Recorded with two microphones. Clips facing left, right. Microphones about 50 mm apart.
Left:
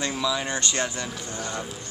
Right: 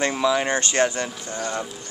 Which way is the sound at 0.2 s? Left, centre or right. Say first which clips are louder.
Right 5 dB; right.